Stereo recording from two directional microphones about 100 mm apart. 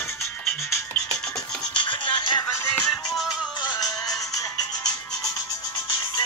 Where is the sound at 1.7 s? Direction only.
55° left (ahead or behind).